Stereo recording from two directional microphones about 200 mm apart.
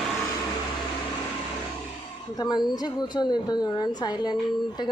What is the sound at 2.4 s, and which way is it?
A woman's voice, 20° left (ahead or behind).